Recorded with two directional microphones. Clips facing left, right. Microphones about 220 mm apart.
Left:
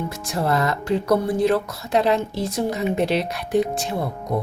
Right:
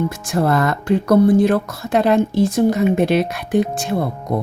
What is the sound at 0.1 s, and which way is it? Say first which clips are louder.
Speech: right 5 dB; 50° right (ahead or behind).